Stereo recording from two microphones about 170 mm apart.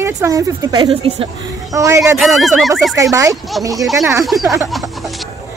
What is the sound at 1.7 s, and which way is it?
Speech, 20° right (ahead or behind).